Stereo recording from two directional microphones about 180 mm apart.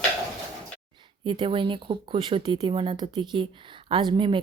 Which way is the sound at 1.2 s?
30° right (ahead or behind).